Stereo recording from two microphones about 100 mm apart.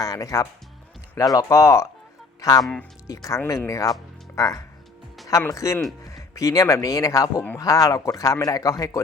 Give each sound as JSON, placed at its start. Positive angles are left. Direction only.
{"t": 0.0, "sound": "a man's voice", "side_deg": 35}